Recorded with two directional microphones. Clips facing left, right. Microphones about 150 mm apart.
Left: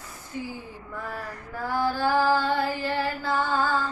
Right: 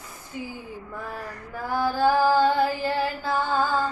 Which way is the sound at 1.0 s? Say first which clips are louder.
Even; 15° right (ahead or behind).